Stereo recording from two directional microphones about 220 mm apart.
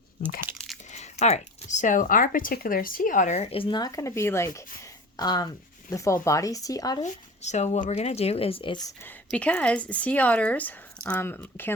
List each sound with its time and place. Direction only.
0.5 s crunch: 10° right (ahead or behind)
0.9 s speech: 30° left (ahead or behind)
7.0 s speech: 30° left (ahead or behind)
9.0 s speech: 5° left (ahead or behind)